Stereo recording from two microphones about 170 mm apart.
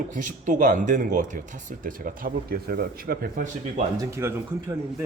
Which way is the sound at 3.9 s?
20° right (ahead or behind).